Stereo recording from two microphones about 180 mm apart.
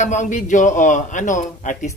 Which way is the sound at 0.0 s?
40° left (ahead or behind).